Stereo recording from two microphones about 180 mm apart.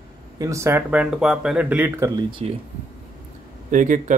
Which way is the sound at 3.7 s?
45° right (ahead or behind).